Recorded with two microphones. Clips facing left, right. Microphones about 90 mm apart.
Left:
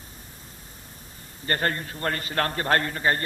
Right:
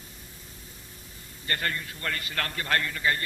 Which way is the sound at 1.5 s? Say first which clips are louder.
Left 5 dB; 40° left (ahead or behind).